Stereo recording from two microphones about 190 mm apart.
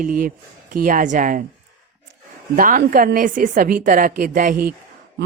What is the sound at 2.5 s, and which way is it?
Speech, 45° right (ahead or behind).